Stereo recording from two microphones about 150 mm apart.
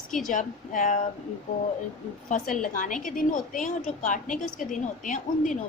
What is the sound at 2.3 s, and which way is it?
A woman's voice, 55° left (ahead or behind).